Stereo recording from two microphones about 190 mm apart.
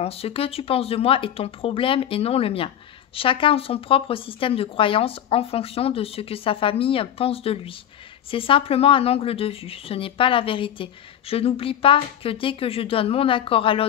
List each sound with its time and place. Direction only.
0.0 s speech: 30° left (ahead or behind)